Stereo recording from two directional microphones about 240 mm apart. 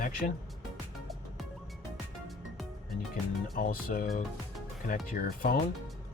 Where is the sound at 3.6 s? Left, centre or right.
Left.